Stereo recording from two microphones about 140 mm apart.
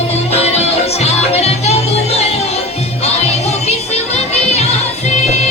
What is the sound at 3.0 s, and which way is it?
Music, 50° left (ahead or behind).